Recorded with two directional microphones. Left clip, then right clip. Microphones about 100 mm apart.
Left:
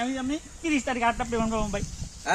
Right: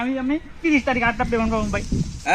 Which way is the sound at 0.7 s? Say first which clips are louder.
Right 5 dB; 20° right (ahead or behind).